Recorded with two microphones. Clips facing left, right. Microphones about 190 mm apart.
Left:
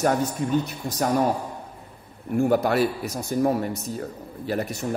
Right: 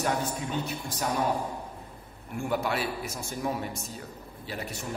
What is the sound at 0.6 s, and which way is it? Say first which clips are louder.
Speech: left 6 dB; 40° left (ahead or behind).